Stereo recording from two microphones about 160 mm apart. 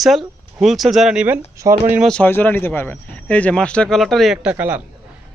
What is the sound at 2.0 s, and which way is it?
Speech, 10° left (ahead or behind).